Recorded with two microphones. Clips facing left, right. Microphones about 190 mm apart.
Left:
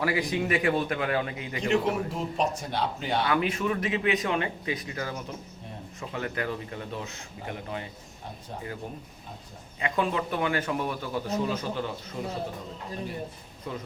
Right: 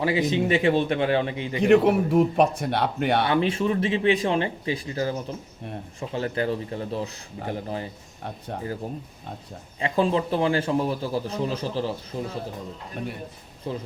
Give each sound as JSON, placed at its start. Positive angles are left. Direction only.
{"t": 0.0, "sound": "speech", "side_deg": -25}
{"t": 1.6, "sound": "speech", "side_deg": -60}
{"t": 3.2, "sound": "a man's voice", "side_deg": -30}
{"t": 9.8, "sound": "a man's voice", "side_deg": -30}
{"t": 13.7, "sound": "a man's voice", "side_deg": -30}